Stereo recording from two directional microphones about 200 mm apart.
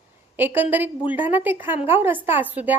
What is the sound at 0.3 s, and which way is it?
A woman's voice, 10° right (ahead or behind).